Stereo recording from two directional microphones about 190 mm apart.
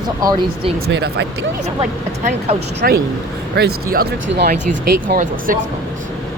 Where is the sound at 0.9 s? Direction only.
60° right (ahead or behind).